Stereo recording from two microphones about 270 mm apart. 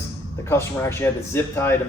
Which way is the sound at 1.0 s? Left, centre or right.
Centre.